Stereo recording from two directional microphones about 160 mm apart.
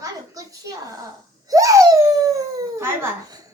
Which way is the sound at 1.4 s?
20° right (ahead or behind).